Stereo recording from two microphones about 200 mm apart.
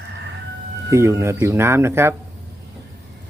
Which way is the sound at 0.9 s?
15° right (ahead or behind).